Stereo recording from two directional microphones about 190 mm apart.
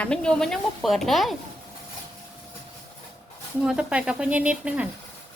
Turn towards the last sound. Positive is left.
turn(degrees=-5)  # may be behind; listen again after turning